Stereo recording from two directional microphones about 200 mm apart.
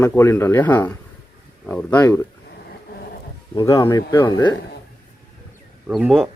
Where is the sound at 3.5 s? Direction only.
20° left (ahead or behind).